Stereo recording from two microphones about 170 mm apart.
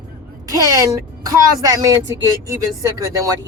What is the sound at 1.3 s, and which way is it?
Speech, 20° right (ahead or behind).